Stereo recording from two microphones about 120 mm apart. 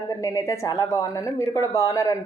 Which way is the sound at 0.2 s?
30° left (ahead or behind).